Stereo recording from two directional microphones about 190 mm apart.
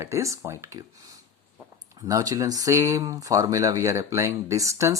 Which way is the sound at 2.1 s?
15° right (ahead or behind).